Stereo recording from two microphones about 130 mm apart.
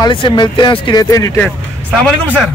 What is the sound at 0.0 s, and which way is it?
Speech, 35° left (ahead or behind).